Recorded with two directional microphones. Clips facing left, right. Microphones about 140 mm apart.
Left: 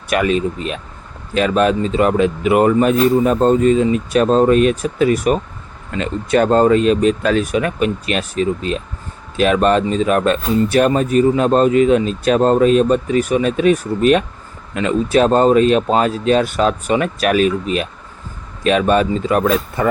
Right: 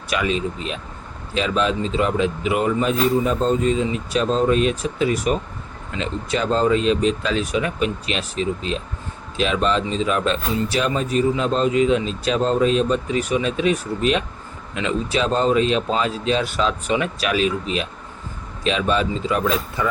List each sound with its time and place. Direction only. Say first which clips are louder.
0.1 s a man's voice: left 6 dB; 55° left (ahead or behind)